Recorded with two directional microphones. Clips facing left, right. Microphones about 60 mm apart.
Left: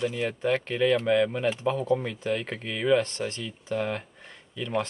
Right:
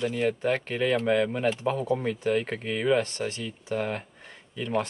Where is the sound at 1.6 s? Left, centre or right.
Centre.